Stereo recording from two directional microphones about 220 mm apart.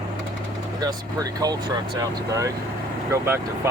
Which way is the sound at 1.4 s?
15° right (ahead or behind).